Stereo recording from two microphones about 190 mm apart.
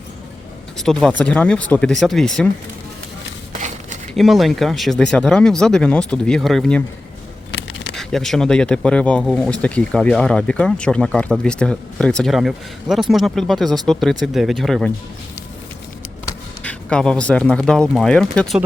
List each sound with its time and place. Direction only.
0.8 s speech: centre (ahead or behind)
4.1 s speech: centre (ahead or behind)
7.5 s a sound: 75° left (ahead or behind)
7.9 s speech: centre (ahead or behind)
16.6 s speech: 5° left (ahead or behind)